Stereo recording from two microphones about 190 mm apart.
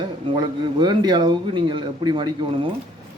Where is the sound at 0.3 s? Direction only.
25° right (ahead or behind).